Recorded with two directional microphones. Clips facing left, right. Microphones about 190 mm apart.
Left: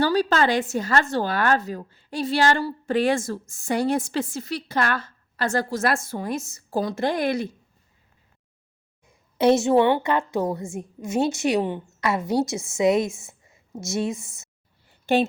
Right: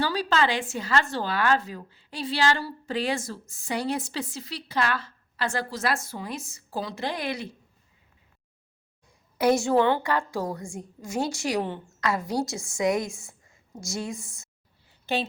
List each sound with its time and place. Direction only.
0.0 s speech: 45° left (ahead or behind)
9.4 s a woman's voice: 25° left (ahead or behind)
15.0 s speech: 50° left (ahead or behind)